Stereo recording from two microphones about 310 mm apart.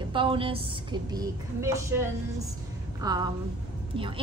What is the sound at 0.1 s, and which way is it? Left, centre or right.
A woman's voice, centre.